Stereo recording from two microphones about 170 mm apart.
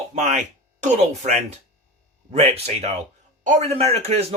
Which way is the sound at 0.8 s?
45° right (ahead or behind).